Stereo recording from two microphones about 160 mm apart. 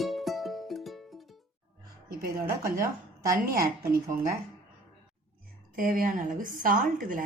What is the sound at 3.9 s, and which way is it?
Speech, 55° right (ahead or behind).